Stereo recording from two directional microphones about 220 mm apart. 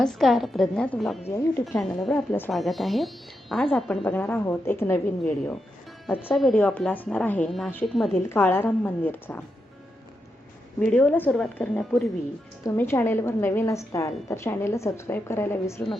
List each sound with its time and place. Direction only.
0.0 s a woman's voice: centre (ahead or behind)
10.8 s a woman's voice: 5° left (ahead or behind)